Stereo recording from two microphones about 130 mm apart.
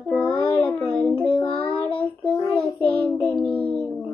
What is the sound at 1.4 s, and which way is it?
Child singing, 40° left (ahead or behind).